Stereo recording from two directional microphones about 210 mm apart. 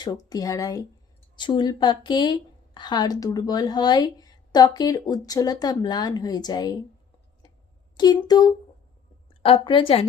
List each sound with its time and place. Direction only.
0.0 s a woman's voice: 20° left (ahead or behind)
7.9 s a woman's voice: 20° left (ahead or behind)